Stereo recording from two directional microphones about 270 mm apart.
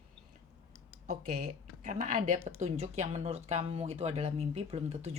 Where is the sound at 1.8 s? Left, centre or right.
Right.